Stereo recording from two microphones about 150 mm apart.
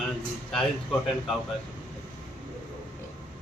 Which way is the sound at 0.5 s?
Centre (ahead or behind).